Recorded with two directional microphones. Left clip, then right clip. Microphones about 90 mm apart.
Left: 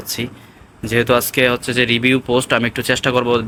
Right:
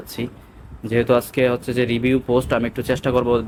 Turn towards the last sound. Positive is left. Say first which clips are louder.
# left 3 dB
turn(degrees=-25)  # may be behind; listen again after turning